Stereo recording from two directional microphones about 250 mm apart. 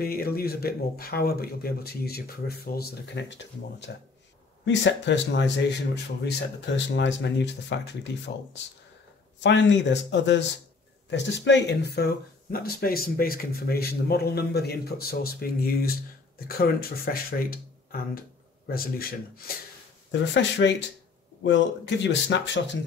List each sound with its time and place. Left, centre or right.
0.0 s speech: left
9.4 s speech: left
18.7 s speech: left